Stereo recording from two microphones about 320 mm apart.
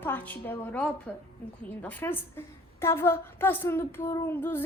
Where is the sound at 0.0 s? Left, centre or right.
Centre.